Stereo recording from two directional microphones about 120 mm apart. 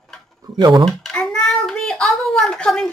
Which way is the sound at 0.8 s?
5° left (ahead or behind).